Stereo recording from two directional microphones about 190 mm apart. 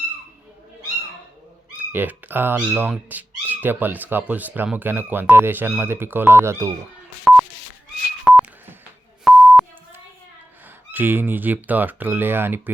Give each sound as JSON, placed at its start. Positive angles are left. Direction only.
{"t": 1.9, "sound": "speech", "side_deg": -10}
{"t": 8.2, "sound": "a sound", "side_deg": -5}
{"t": 9.2, "sound": "beep", "side_deg": 0}
{"t": 10.9, "sound": "speech", "side_deg": -10}